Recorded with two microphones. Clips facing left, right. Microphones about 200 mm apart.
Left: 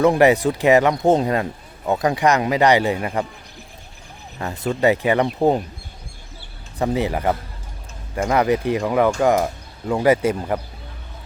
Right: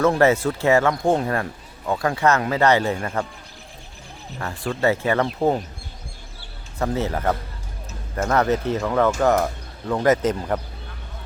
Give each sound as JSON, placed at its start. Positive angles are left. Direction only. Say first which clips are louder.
{"t": 0.0, "sound": "speech", "louder": "left 3 dB", "side_deg": 15}
{"t": 4.4, "sound": "speech", "louder": "left 3 dB", "side_deg": 20}
{"t": 6.7, "sound": "speech", "louder": "left 3 dB", "side_deg": 15}